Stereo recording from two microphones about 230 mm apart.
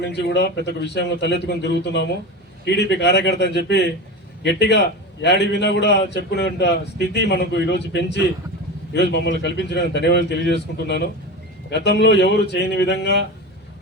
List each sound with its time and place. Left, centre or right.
0.0 s a man's voice: left